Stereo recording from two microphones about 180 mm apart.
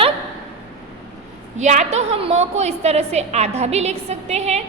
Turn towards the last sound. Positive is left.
turn(degrees=-35)  # may be behind; listen again after turning